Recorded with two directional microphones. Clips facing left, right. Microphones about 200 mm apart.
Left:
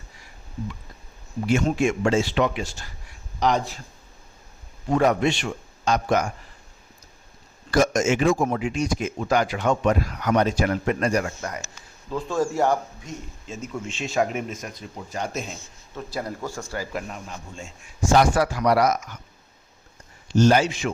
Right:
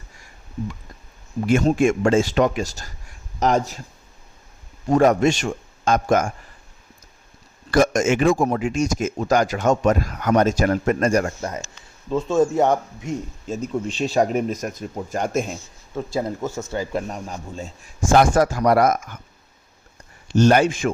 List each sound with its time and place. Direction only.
1.7 s speech: 50° right (ahead or behind)
4.9 s speech: 45° right (ahead or behind)
7.7 s speech: 55° right (ahead or behind)
11.3 s speech: 25° right (ahead or behind)
13.5 s speech: 35° right (ahead or behind)
16.0 s speech: 25° right (ahead or behind)
17.1 s speech: 40° right (ahead or behind)
20.2 s speech: 60° right (ahead or behind)